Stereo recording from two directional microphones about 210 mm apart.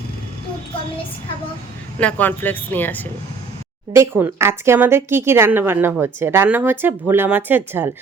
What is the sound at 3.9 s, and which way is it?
Speech, 10° right (ahead or behind).